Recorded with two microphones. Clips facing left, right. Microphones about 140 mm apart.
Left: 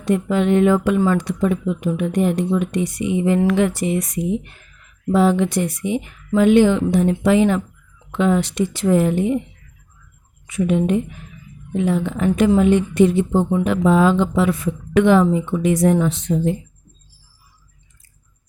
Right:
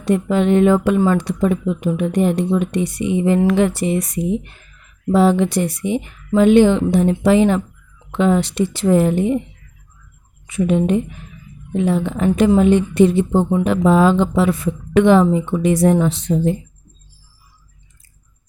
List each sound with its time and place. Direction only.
0.0 s speech: 30° right (ahead or behind)
10.4 s a woman's voice: 30° right (ahead or behind)